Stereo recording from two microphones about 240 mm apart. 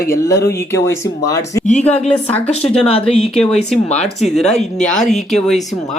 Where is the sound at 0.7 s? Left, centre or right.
Centre.